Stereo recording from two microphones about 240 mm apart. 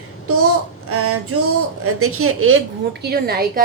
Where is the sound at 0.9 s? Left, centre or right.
Right.